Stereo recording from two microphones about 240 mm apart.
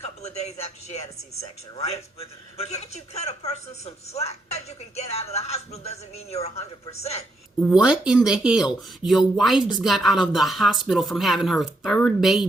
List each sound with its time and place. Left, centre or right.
0.2 s a woman's voice: left
7.7 s speech: centre